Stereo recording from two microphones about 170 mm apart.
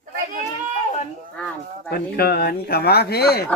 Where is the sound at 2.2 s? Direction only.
70° left (ahead or behind).